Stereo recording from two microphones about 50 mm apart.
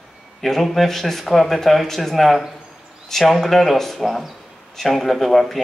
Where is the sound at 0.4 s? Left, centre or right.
Centre.